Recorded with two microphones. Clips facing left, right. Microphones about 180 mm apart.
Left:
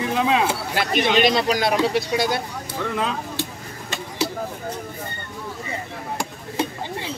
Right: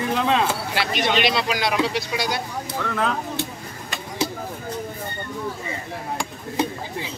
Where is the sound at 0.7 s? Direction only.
45° left (ahead or behind).